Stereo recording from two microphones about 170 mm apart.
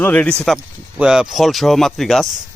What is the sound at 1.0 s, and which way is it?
Speech, 5° right (ahead or behind).